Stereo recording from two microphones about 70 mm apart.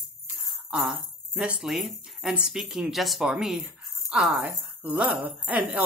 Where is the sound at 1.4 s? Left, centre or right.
Centre.